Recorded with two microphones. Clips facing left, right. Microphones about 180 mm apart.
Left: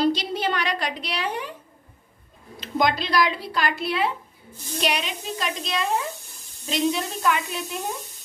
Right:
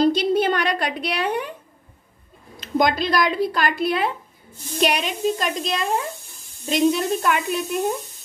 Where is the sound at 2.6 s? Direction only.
45° right (ahead or behind).